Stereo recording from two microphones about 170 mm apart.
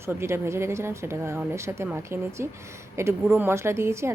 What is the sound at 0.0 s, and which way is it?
A woman's voice, 15° right (ahead or behind).